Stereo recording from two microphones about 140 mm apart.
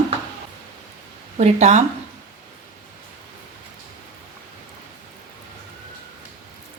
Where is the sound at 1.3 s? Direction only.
55° right (ahead or behind).